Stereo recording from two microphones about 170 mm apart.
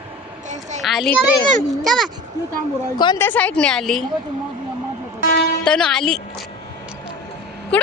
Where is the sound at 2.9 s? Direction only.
25° left (ahead or behind).